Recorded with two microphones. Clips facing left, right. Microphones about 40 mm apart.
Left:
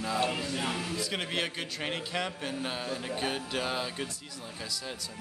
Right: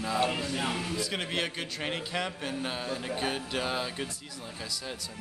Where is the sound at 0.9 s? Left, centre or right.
Centre.